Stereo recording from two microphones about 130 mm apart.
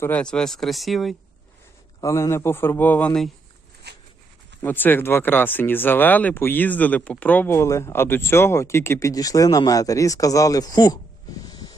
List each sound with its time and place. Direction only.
0.0 s speech: 10° left (ahead or behind)
2.0 s a man's voice: 25° left (ahead or behind)
4.6 s speech: 15° left (ahead or behind); by 10.9 s 30° left (ahead or behind)
11.4 s snort: 30° left (ahead or behind)